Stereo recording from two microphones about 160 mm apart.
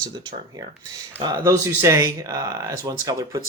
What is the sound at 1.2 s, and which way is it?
Speech, 25° right (ahead or behind).